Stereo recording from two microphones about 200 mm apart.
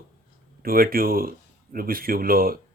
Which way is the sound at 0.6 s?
45° right (ahead or behind).